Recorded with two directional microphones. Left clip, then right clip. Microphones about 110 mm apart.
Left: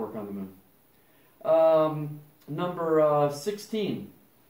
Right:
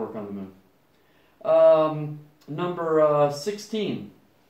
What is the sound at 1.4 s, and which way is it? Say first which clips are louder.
Speech: right 4 dB; 25° left (ahead or behind).